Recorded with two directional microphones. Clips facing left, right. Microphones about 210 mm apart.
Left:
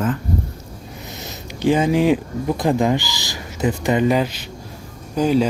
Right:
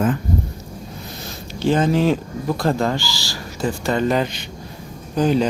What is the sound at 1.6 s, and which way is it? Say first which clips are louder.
Speech: left 1 dB; 15° left (ahead or behind).